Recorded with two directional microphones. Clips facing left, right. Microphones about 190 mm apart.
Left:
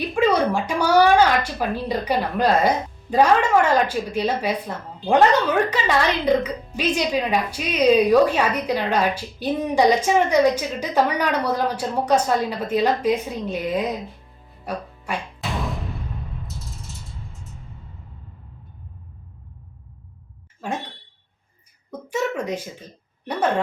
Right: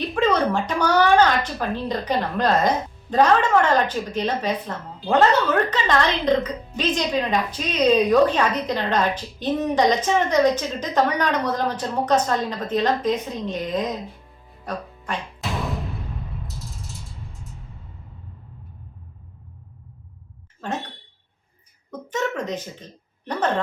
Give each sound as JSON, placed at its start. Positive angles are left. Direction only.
{"t": 0.0, "sound": "a woman's voice", "side_deg": 10}
{"t": 5.7, "sound": "a woman's voice", "side_deg": 10}
{"t": 14.6, "sound": "music", "side_deg": 10}
{"t": 16.5, "sound": "a sound", "side_deg": 0}
{"t": 20.6, "sound": "a woman's voice", "side_deg": 10}
{"t": 21.9, "sound": "a woman's voice", "side_deg": 10}